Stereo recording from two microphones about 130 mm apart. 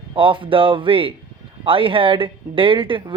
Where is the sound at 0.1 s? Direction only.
40° right (ahead or behind).